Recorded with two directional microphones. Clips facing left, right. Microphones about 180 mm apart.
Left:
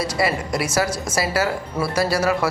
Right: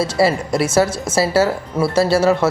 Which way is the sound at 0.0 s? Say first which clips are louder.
Right 6 dB; 25° right (ahead or behind).